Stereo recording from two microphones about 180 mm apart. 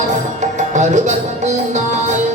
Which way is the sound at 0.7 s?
40° right (ahead or behind).